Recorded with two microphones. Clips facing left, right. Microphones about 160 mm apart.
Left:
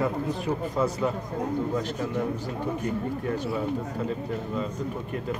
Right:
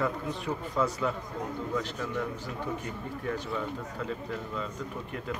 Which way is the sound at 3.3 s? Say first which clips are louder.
Left 5 dB; 35° left (ahead or behind).